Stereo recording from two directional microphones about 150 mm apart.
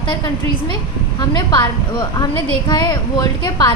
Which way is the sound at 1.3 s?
30° left (ahead or behind).